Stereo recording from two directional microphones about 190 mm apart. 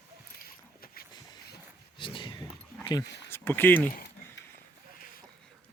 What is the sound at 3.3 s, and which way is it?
Speech, 10° left (ahead or behind).